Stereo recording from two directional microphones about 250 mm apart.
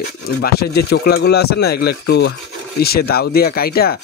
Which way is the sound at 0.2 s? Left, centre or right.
Left.